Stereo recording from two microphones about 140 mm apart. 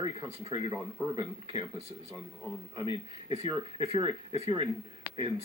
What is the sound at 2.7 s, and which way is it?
Speech, 35° right (ahead or behind).